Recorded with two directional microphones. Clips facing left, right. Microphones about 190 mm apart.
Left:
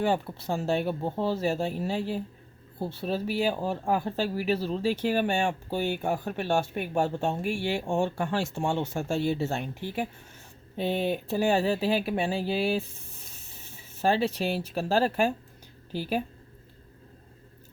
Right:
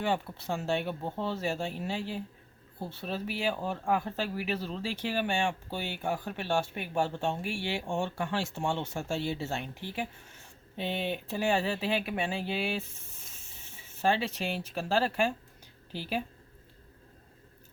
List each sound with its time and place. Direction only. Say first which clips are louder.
0.0 s speech: left 4 dB; 40° left (ahead or behind)
14.0 s speech: left 4 dB; 40° left (ahead or behind)